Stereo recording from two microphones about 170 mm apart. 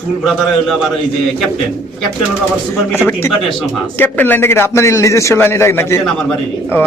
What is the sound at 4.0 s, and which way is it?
A man's voice, 10° left (ahead or behind).